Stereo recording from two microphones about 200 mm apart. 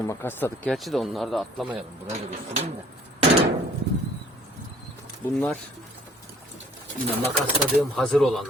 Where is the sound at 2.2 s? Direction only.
30° right (ahead or behind).